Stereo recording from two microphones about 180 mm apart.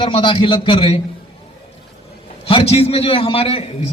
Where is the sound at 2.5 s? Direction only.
35° left (ahead or behind).